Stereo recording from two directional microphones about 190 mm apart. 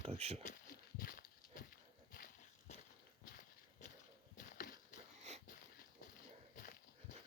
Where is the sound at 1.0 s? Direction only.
50° left (ahead or behind).